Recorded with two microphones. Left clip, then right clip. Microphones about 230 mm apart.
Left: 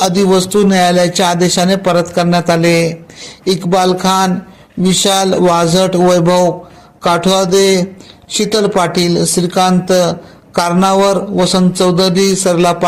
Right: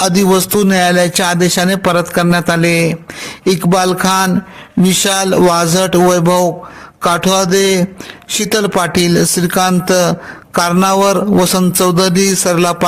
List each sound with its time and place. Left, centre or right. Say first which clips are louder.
0.0 s speech: left 1 dB; right
11.7 s a sound: even; right
12.5 s speech: left 2 dB; right